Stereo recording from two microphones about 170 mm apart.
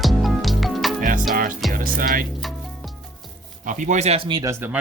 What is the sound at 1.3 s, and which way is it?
Music, 55° right (ahead or behind).